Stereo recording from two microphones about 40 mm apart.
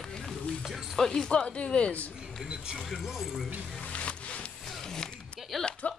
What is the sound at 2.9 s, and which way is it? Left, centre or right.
Speech, centre.